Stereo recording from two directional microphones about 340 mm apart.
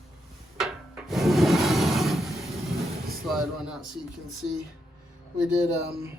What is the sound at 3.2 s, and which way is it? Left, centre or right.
Speech, centre.